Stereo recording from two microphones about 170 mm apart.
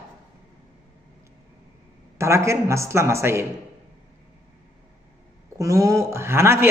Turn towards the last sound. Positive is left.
turn(degrees=-15)  # may be behind; listen again after turning